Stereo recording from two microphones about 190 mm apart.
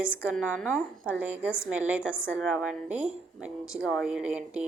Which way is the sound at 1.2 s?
5° right (ahead or behind).